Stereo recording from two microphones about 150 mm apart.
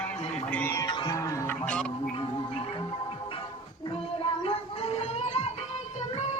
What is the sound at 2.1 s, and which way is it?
Music, 35° left (ahead or behind).